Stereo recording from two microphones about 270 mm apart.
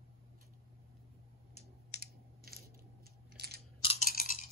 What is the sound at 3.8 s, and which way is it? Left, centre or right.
Chewing, left.